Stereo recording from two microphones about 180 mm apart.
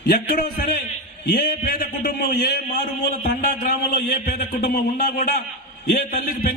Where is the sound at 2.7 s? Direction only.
45° left (ahead or behind).